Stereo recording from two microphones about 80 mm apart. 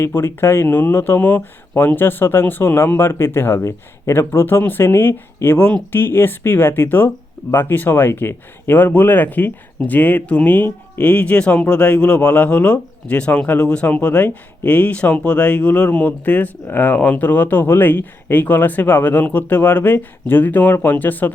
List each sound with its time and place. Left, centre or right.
0.0 s speech: left